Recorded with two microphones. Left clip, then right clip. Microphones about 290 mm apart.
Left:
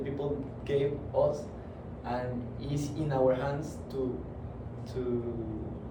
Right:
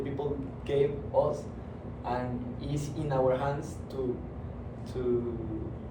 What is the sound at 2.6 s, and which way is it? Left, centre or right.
Speech, centre.